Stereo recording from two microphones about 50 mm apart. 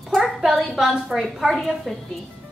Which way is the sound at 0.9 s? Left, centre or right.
Centre.